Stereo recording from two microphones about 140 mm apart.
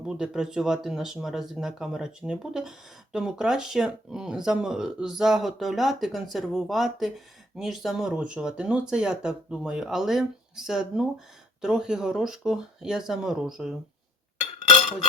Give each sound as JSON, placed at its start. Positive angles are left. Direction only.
{"t": 0.0, "sound": "speech", "side_deg": -5}